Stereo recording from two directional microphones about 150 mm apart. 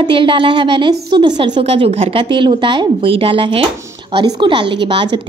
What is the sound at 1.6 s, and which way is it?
A woman's voice, 45° right (ahead or behind).